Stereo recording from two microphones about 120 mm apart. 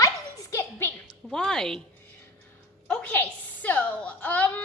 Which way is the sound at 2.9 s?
15° left (ahead or behind).